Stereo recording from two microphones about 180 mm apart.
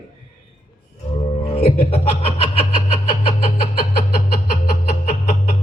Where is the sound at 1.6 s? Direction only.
35° left (ahead or behind).